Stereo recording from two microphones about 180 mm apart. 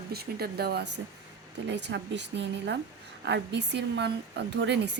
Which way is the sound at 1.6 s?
75° right (ahead or behind).